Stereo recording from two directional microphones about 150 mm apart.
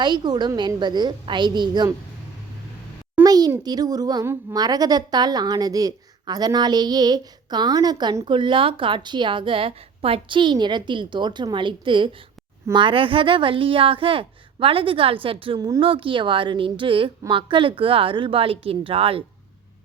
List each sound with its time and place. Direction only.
0.0 s a woman's voice: 30° right (ahead or behind)
3.2 s a sound: 25° right (ahead or behind)
3.6 s a woman's voice: 25° right (ahead or behind)